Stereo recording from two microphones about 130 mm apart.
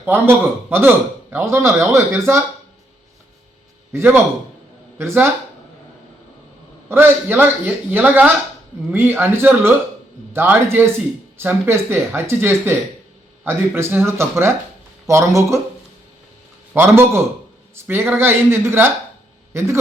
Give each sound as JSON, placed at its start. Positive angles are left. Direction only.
{"t": 0.0, "sound": "speech", "side_deg": -15}
{"t": 3.9, "sound": "a man's voice", "side_deg": -15}
{"t": 6.8, "sound": "a man's voice", "side_deg": -15}
{"t": 16.7, "sound": "a man's voice", "side_deg": -20}